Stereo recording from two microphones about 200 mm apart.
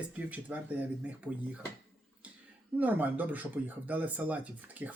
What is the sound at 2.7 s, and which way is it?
Speech, 10° right (ahead or behind).